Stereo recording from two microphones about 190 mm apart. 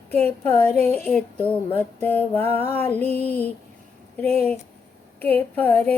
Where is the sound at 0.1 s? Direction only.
10° left (ahead or behind).